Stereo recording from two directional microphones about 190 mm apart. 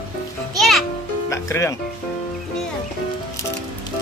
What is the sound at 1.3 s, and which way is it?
Music, 15° left (ahead or behind).